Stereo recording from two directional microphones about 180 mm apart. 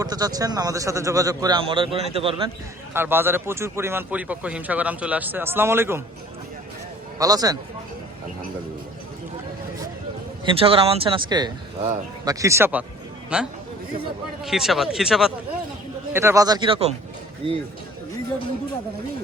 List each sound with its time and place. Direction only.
0.0 s a man's voice: 20° right (ahead or behind)
2.9 s speech: 10° right (ahead or behind)
7.2 s a man's voice: 20° right (ahead or behind)
10.4 s a man's voice: 30° right (ahead or behind); by 15.3 s centre (ahead or behind)
16.1 s a man's voice: 15° right (ahead or behind)